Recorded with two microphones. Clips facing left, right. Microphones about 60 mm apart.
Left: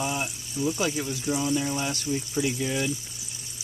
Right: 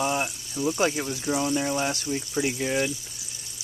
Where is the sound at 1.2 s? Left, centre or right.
Right.